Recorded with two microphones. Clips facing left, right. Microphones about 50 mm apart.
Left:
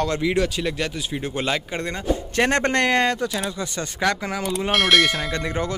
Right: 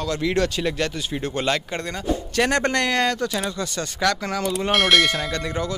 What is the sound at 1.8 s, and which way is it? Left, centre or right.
Speech, left.